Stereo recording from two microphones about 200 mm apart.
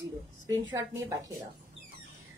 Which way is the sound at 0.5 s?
20° right (ahead or behind).